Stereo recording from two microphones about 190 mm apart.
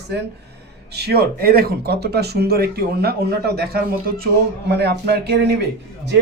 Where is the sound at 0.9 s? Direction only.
55° right (ahead or behind).